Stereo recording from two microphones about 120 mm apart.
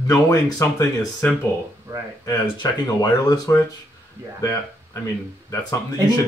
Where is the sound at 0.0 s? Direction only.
30° left (ahead or behind).